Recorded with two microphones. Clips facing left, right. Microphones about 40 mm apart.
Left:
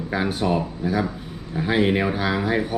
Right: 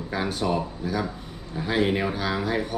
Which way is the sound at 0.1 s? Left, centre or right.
Centre.